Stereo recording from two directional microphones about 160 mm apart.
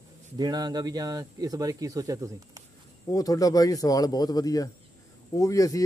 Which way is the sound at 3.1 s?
20° left (ahead or behind).